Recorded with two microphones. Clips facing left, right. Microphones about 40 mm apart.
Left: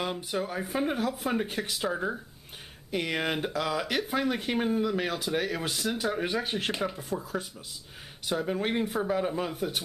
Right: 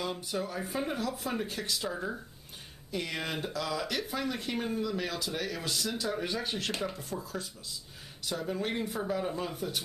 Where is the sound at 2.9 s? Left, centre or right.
Left.